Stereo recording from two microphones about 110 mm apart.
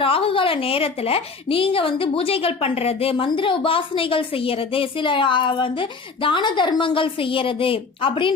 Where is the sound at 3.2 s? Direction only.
50° left (ahead or behind).